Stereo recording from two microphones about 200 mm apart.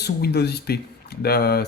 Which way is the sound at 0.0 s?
55° left (ahead or behind).